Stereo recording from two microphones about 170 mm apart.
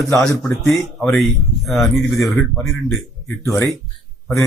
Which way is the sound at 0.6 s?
Centre (ahead or behind).